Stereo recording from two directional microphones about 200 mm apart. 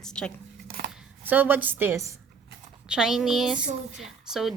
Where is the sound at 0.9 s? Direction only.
10° right (ahead or behind).